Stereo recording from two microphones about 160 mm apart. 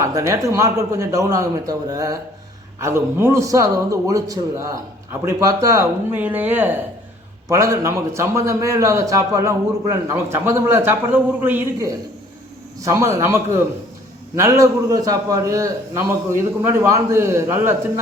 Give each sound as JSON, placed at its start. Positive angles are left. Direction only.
{"t": 0.0, "sound": "a man's voice", "side_deg": -20}